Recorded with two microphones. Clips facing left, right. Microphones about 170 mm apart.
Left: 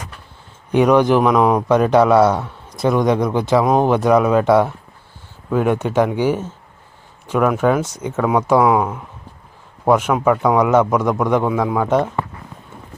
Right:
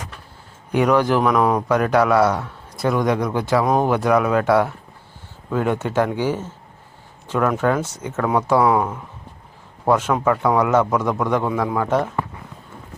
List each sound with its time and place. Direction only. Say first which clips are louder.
0.7 s a man's voice: left 4 dB; 20° left (ahead or behind)